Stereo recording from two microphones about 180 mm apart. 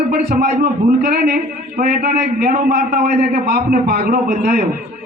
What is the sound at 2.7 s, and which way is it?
A man's voice, 60° right (ahead or behind).